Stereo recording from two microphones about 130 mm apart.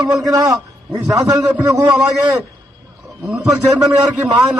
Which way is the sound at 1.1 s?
25° right (ahead or behind).